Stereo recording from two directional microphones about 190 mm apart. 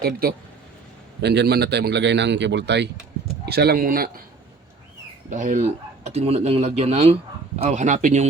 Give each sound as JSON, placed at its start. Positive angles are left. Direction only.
{"t": 0.0, "sound": "a man's voice", "side_deg": -50}
{"t": 5.3, "sound": "a man's voice", "side_deg": -40}